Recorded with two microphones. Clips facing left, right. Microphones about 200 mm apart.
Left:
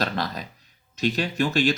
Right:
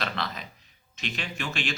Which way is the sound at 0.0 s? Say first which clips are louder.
Left 6 dB; 40° left (ahead or behind).